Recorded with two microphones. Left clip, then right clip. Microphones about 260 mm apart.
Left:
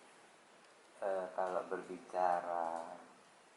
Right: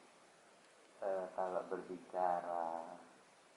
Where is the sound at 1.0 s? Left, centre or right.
Centre.